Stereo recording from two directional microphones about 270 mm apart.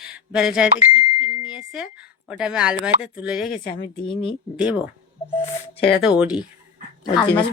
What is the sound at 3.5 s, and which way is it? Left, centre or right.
Speech, left.